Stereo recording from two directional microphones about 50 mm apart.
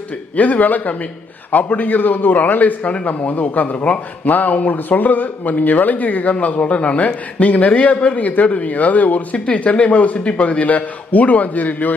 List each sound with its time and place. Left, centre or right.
0.4 s speech: left